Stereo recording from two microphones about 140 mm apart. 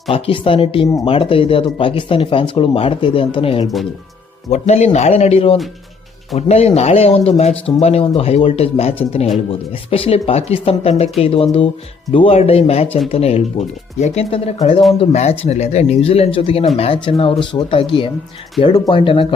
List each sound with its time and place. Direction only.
0.1 s speech: 40° left (ahead or behind)
4.4 s speech: 55° left (ahead or behind); by 19.3 s 40° left (ahead or behind)